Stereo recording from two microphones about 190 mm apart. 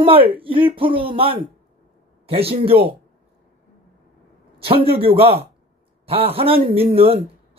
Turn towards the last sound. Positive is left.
turn(degrees=-30)  # may be behind; listen again after turning